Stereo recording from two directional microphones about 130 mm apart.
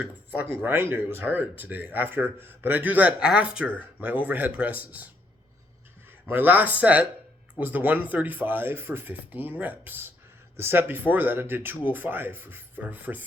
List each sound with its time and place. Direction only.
0.0 s speech: 10° right (ahead or behind)
6.2 s speech: 15° right (ahead or behind)